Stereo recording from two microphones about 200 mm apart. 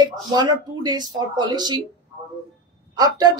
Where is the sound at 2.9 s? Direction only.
20° right (ahead or behind).